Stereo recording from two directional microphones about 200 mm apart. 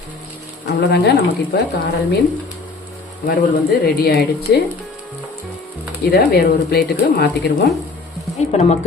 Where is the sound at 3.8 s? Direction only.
50° left (ahead or behind).